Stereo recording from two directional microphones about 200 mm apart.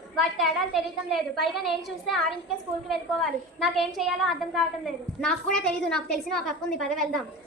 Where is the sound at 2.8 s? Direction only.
Centre (ahead or behind).